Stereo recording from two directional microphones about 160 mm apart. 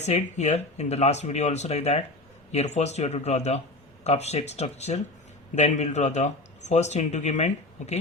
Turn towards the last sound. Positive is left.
turn(degrees=45)  # may be behind; listen again after turning